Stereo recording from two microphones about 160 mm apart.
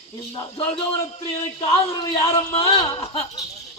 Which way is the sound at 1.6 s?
30° left (ahead or behind).